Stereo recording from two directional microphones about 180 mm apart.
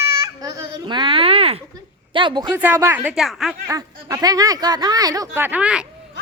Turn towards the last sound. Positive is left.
turn(degrees=-5)  # may be behind; listen again after turning